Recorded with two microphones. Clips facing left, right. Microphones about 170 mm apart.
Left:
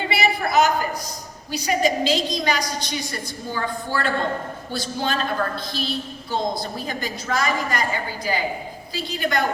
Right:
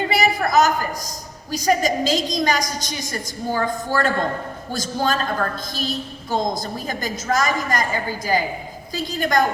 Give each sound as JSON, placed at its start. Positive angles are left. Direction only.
{"t": 0.1, "sound": "a sound", "side_deg": -40}
{"t": 1.5, "sound": "a woman's voice", "side_deg": -40}
{"t": 6.3, "sound": "a woman's voice", "side_deg": -45}
{"t": 9.1, "sound": "a woman's voice", "side_deg": -45}